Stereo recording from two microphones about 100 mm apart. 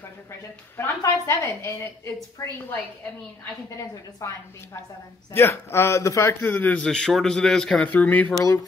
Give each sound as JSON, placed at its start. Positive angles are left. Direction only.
{"t": 0.7, "sound": "a woman's voice", "side_deg": 30}
{"t": 4.2, "sound": "a woman's voice", "side_deg": 25}
{"t": 6.4, "sound": "speech", "side_deg": 20}
{"t": 6.9, "sound": "speech", "side_deg": 5}